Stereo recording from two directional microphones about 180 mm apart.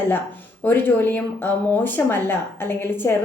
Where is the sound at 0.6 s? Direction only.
10° left (ahead or behind).